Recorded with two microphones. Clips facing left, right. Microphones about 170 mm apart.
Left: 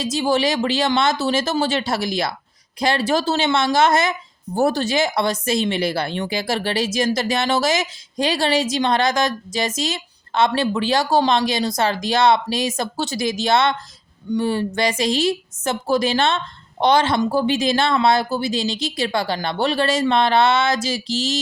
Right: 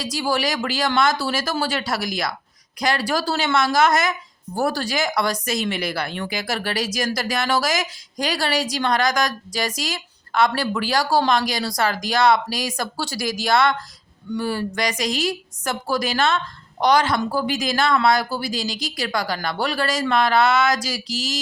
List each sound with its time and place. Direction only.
0.0 s speech: 25° left (ahead or behind)